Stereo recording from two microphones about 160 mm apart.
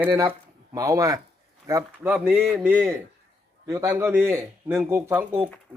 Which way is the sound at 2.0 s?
5° right (ahead or behind).